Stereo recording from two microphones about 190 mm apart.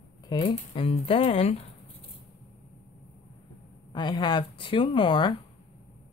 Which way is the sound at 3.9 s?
25° left (ahead or behind).